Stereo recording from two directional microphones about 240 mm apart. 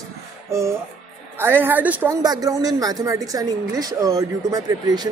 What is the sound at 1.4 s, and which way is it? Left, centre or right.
A woman's voice, centre.